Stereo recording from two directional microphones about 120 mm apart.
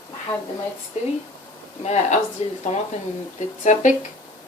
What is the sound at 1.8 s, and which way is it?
Speech, 65° left (ahead or behind).